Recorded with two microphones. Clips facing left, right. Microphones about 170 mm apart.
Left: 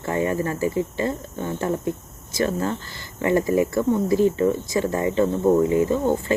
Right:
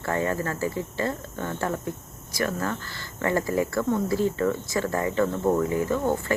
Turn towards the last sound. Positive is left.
turn(degrees=20)  # may be behind; listen again after turning